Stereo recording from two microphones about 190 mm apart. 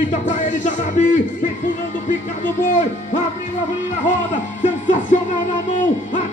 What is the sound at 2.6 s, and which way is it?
Speech, 40° left (ahead or behind).